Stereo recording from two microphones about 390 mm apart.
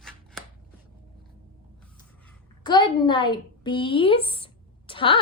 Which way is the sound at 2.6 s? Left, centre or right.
Centre.